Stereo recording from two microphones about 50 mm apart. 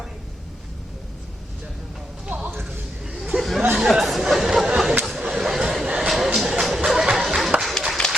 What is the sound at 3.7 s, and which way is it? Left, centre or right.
Chatter, centre.